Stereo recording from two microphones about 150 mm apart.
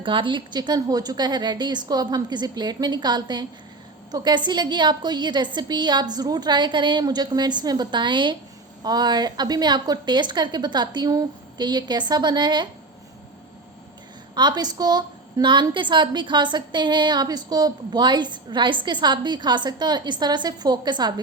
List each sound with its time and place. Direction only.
0.0 s a woman's voice: 35° right (ahead or behind)
14.3 s a woman's voice: 30° right (ahead or behind)